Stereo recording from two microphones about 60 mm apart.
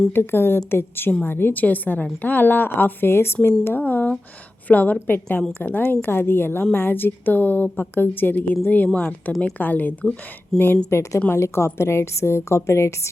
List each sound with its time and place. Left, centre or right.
0.1 s a woman's voice: left
10.8 s a woman's voice: left